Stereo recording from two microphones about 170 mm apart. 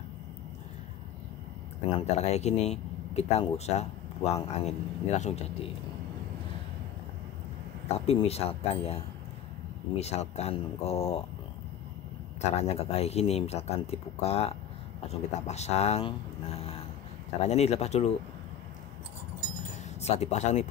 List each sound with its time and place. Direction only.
2.0 s speech: 40° left (ahead or behind)
8.1 s speech: 35° left (ahead or behind)
12.4 s speech: 40° left (ahead or behind)
20.0 s speech: 40° left (ahead or behind)